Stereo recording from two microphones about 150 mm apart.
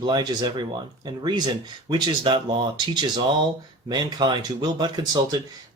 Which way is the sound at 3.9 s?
30° right (ahead or behind).